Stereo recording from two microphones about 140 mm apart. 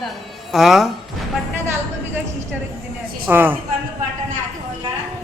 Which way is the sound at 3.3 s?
15° right (ahead or behind).